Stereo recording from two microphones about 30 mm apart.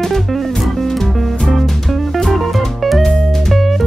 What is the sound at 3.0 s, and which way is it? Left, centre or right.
Music, centre.